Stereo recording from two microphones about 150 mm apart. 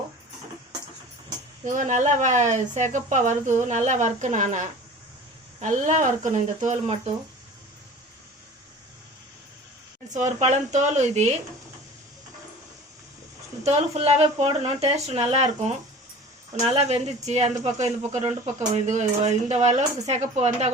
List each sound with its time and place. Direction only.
1.6 s speech: 55° right (ahead or behind)
10.1 s speech: 50° right (ahead or behind)
13.7 s speech: 45° right (ahead or behind)